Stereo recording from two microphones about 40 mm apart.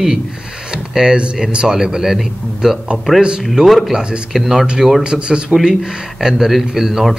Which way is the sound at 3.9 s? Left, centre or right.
Right.